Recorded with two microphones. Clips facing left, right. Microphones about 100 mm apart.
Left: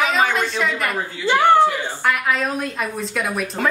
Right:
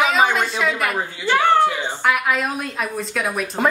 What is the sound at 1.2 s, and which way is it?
Speech, 15° left (ahead or behind).